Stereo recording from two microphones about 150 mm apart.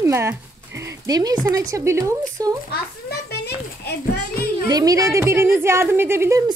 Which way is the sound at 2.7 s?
90° left.